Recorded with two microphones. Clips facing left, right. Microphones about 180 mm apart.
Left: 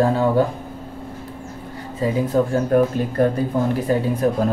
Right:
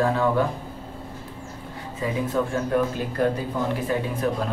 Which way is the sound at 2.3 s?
40° left (ahead or behind).